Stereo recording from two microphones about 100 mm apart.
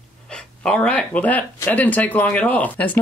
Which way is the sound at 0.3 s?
10° left (ahead or behind).